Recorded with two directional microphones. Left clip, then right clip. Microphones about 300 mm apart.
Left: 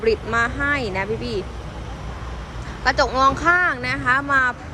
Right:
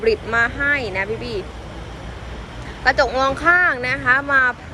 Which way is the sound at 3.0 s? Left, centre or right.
Centre.